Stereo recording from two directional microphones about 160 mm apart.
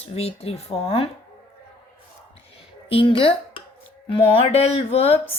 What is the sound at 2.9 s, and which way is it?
Speech, 35° left (ahead or behind).